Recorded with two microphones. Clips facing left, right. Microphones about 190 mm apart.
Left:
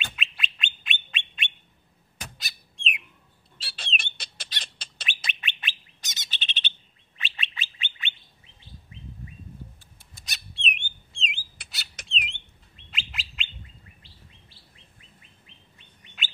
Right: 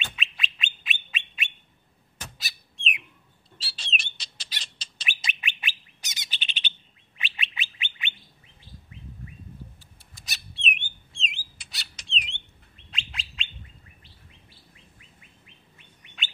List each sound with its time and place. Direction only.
0.0 s bird: centre (ahead or behind)
3.5 s squawk: 55° left (ahead or behind)
4.6 s bird: 55° left (ahead or behind)
5.0 s bird: 10° right (ahead or behind)
10.2 s bird: centre (ahead or behind)
12.0 s bird: 55° left (ahead or behind)
12.9 s bird: centre (ahead or behind)